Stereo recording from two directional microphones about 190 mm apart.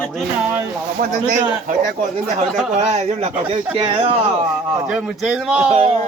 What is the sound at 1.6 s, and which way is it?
Speech, 45° right (ahead or behind).